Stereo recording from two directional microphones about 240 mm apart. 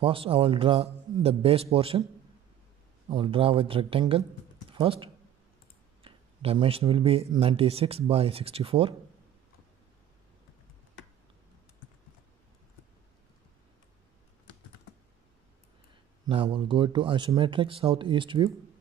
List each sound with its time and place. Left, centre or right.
0.0 s speech: right
3.1 s speech: right
16.3 s speech: right